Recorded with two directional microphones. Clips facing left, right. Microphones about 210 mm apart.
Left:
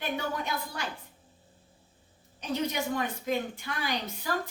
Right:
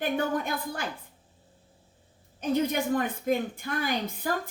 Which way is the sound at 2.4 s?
50° right (ahead or behind).